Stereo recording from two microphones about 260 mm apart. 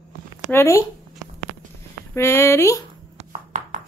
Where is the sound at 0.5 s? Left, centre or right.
Centre.